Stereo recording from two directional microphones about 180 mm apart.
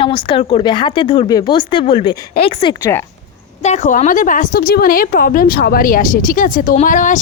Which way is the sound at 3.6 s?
40° left (ahead or behind).